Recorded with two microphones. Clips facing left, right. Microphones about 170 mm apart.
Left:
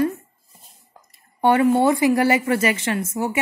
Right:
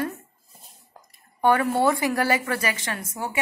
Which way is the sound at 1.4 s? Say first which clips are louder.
Left 4 dB; 20° left (ahead or behind).